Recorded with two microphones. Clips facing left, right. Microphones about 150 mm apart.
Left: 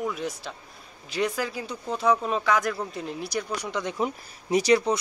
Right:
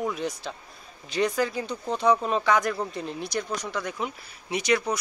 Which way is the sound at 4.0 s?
40° left (ahead or behind).